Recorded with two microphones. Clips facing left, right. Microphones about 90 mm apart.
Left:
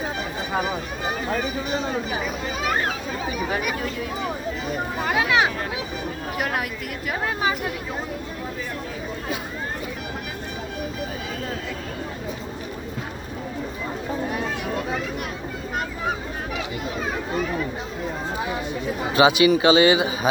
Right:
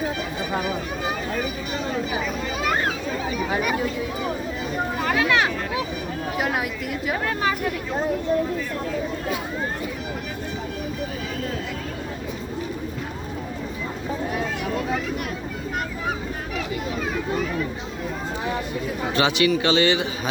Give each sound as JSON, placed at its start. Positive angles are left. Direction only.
{"t": 5.0, "sound": "a sound", "side_deg": 15}
{"t": 6.3, "sound": "speech", "side_deg": -15}
{"t": 7.3, "sound": "a man's voice", "side_deg": 15}
{"t": 19.1, "sound": "a man's voice", "side_deg": 15}